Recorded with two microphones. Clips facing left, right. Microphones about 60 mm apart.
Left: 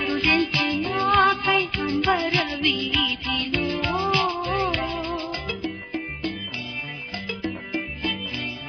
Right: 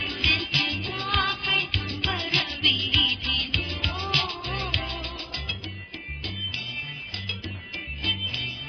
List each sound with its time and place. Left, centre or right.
0.0 s music: left